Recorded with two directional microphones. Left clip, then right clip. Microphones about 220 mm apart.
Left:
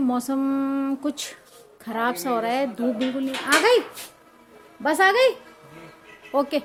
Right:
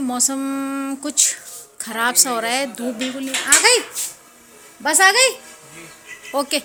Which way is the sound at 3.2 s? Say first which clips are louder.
Right 4 dB; 10° left (ahead or behind).